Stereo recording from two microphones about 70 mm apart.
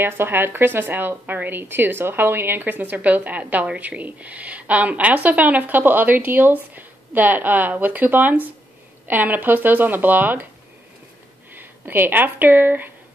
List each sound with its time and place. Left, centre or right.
0.0 s speech: right
11.5 s speech: right